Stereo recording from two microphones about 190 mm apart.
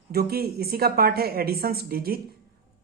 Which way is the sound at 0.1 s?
55° right (ahead or behind).